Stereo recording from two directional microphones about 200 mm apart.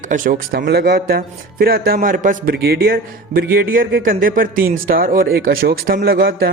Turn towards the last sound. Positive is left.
turn(degrees=-45)  # may be behind; listen again after turning